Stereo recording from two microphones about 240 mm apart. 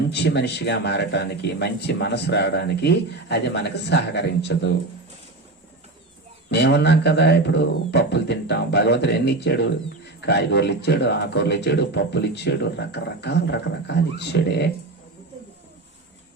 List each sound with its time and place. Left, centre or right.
0.1 s speech: left
6.5 s speech: left